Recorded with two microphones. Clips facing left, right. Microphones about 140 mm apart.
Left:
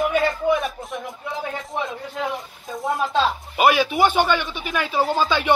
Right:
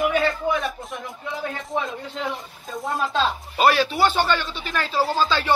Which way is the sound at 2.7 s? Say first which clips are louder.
Left 3 dB; centre (ahead or behind).